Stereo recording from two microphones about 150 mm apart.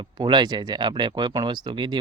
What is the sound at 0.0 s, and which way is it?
Speech, 30° right (ahead or behind).